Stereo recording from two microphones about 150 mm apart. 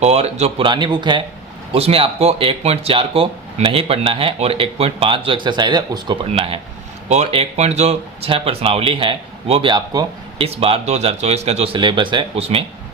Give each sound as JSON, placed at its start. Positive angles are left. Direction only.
{"t": 0.0, "sound": "speech", "side_deg": -45}
{"t": 10.4, "sound": "speech", "side_deg": -40}